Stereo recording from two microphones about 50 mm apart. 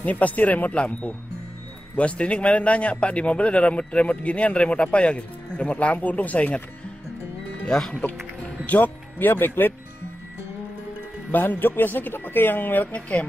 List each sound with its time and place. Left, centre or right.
0.0 s speech: left
0.7 s a man's voice: left
7.6 s speech: centre
8.6 s speech: left
11.3 s speech: left